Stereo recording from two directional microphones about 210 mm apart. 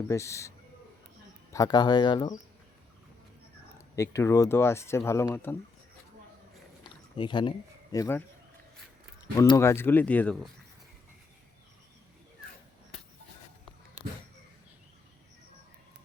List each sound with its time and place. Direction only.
0.1 s speech: 15° left (ahead or behind)
1.5 s speech: 20° left (ahead or behind)
3.9 s speech: 15° left (ahead or behind)
6.8 s a sound: 20° left (ahead or behind)
7.9 s speech: 10° left (ahead or behind)
9.4 s speech: 15° left (ahead or behind)